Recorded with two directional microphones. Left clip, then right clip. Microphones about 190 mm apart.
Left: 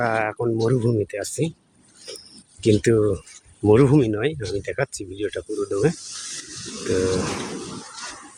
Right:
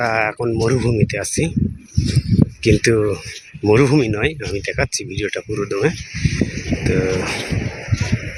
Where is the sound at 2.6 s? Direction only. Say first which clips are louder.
Right 2 dB; 5° right (ahead or behind).